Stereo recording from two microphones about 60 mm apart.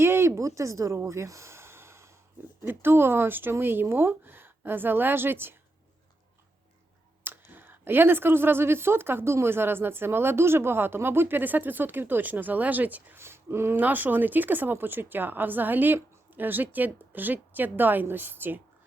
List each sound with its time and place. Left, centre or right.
0.0 s speech: right
7.3 s speech: right
13.1 s speech: right
13.7 s speech: right